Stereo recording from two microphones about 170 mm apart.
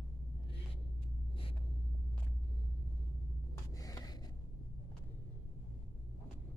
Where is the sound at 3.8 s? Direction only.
20° left (ahead or behind).